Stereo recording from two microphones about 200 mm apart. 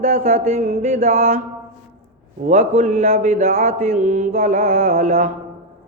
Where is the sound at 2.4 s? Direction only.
35° right (ahead or behind).